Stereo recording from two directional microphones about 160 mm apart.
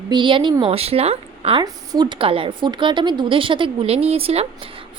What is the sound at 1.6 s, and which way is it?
Speech, 25° right (ahead or behind).